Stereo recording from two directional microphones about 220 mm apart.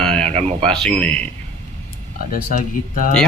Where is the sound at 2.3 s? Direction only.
40° left (ahead or behind).